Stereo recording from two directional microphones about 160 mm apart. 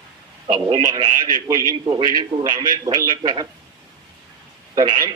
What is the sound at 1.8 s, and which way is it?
A man's voice, 30° right (ahead or behind).